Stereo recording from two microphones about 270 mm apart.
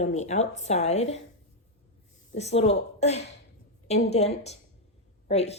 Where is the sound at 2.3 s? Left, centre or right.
Left.